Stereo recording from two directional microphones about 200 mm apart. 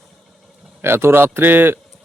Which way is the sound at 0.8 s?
10° right (ahead or behind).